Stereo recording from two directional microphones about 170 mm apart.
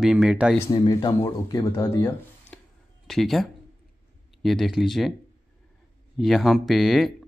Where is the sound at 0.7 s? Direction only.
25° left (ahead or behind).